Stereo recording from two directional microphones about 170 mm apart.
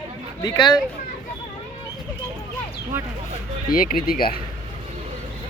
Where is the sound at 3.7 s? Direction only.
60° left (ahead or behind).